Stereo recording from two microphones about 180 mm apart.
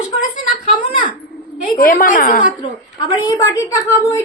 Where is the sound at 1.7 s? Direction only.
50° left (ahead or behind).